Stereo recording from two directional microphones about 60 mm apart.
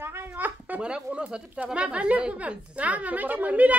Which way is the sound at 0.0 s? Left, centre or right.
Right.